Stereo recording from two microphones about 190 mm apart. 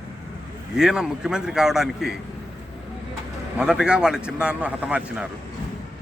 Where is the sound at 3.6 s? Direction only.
5° right (ahead or behind).